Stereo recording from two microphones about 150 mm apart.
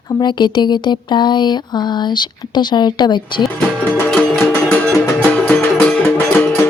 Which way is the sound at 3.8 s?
5° left (ahead or behind).